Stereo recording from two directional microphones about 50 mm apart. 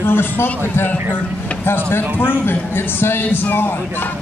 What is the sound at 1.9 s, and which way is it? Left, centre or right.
A man's voice, left.